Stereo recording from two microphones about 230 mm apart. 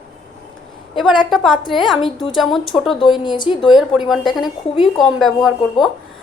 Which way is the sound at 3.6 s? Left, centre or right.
Centre.